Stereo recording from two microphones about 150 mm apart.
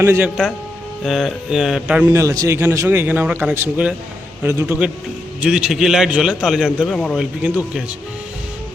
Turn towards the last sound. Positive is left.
turn(degrees=-10)  # may be behind; listen again after turning